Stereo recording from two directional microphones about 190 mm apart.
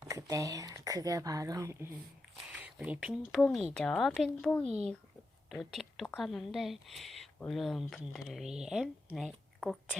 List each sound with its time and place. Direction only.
0.1 s speech: 15° right (ahead or behind)
2.6 s speech: 5° right (ahead or behind)
4.6 s a child's voice: 35° right (ahead or behind)
5.5 s a woman's voice: centre (ahead or behind)